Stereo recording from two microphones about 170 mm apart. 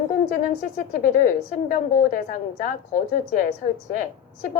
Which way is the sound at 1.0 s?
50° left (ahead or behind).